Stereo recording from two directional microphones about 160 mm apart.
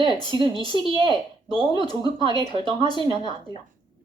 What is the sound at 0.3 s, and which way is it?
Speech, 30° right (ahead or behind).